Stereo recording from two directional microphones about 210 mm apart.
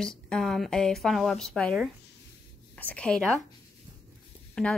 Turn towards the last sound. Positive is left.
turn(degrees=5)  # may be behind; listen again after turning